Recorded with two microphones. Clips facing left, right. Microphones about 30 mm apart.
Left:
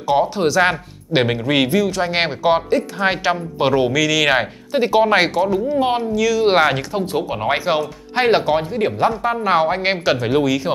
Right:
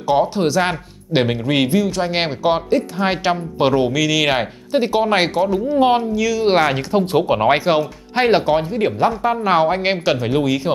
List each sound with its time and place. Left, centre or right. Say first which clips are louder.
0.0 s a man's voice: even; centre
7.2 s speech: right 7 dB; right
7.4 s speech: right 1 dB; centre
8.1 s a man's voice: right 1 dB; centre
10.4 s speech: even; centre